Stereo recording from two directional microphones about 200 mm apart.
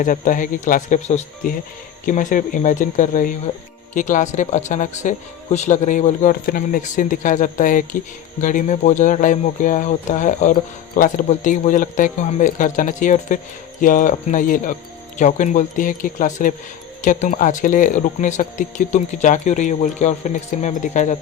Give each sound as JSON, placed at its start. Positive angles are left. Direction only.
{"t": 0.0, "sound": "speech", "side_deg": 40}